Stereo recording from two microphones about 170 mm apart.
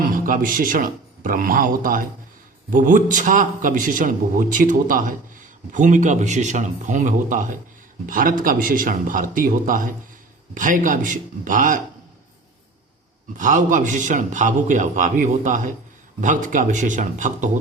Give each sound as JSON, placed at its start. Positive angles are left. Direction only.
{"t": 0.0, "sound": "a man's voice", "side_deg": -55}
{"t": 13.3, "sound": "a man's voice", "side_deg": -50}